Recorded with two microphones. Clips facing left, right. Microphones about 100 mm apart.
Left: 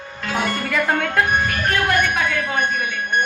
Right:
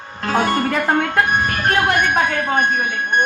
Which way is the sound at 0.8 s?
25° right (ahead or behind).